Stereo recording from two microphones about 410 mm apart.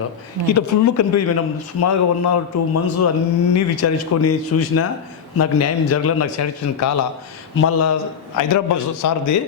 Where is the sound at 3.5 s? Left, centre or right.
Left.